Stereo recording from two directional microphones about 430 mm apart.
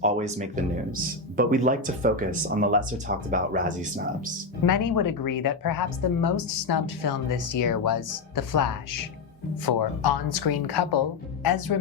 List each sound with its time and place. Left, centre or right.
0.0 s speech: centre
4.6 s a woman's voice: left
9.6 s a woman's voice: left